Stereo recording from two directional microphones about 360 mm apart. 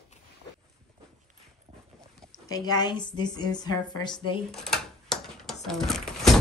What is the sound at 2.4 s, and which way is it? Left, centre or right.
A woman's voice, centre.